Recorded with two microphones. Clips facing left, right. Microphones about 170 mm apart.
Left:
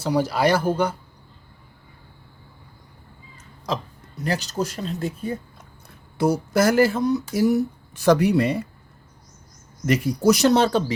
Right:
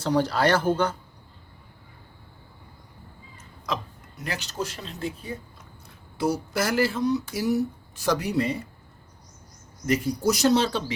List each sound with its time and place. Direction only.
0.0 s speech: 10° left (ahead or behind)
3.7 s speech: 30° left (ahead or behind); by 7.5 s 50° left (ahead or behind)
7.9 s speech: 60° left (ahead or behind)
9.8 s speech: 70° left (ahead or behind); by 10.9 s 45° left (ahead or behind)